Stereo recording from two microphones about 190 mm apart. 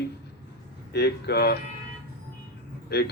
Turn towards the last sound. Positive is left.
turn(degrees=60)  # may be behind; listen again after turning